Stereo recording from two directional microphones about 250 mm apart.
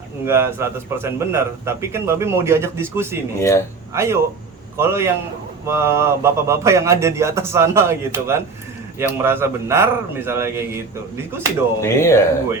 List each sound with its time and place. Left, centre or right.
0.3 s a man's voice: centre
3.3 s speech: centre
3.9 s a man's voice: centre
11.8 s speech: centre